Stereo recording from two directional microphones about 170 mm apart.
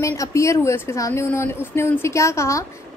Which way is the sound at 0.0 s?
15° left (ahead or behind).